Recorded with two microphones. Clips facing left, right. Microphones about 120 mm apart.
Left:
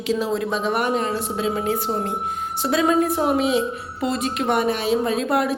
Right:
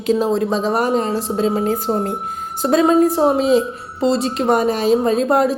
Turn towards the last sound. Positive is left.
turn(degrees=-40)  # may be behind; listen again after turning